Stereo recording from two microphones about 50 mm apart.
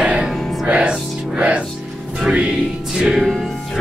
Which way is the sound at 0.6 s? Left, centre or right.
Centre.